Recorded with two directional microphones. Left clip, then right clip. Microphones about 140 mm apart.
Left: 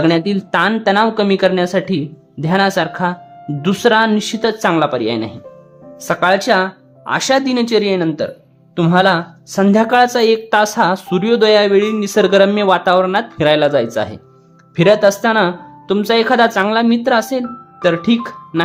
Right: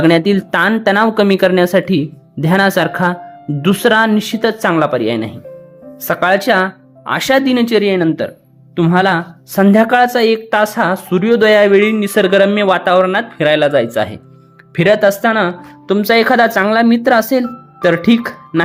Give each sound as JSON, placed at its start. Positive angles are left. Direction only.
{"t": 0.0, "sound": "speech", "side_deg": -20}
{"t": 8.7, "sound": "speech", "side_deg": 0}
{"t": 15.9, "sound": "speech", "side_deg": -15}